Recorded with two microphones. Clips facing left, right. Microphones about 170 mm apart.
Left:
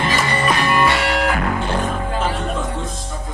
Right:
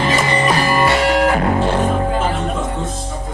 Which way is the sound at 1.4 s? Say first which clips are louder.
Right 5 dB; 30° right (ahead or behind).